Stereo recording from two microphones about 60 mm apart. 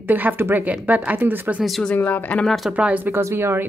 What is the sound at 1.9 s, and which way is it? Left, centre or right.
Speech, left.